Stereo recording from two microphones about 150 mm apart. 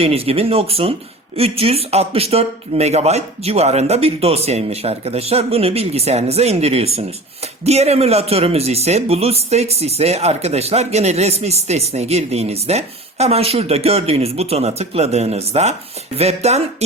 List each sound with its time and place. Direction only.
0.0 s speech: 40° right (ahead or behind)